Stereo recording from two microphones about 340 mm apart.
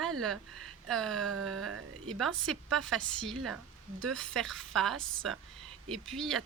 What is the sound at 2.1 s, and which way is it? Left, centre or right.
Speech, centre.